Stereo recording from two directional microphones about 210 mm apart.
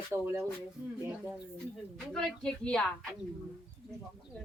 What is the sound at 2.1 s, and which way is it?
Speech, 5° left (ahead or behind).